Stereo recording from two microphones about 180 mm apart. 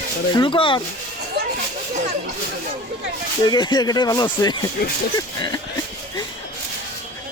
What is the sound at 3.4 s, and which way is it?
Speech, 25° left (ahead or behind).